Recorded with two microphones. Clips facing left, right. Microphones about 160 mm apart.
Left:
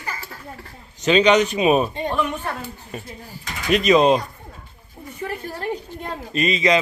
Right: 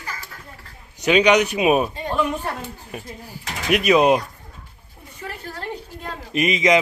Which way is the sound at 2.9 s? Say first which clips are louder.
Even; 10° right (ahead or behind).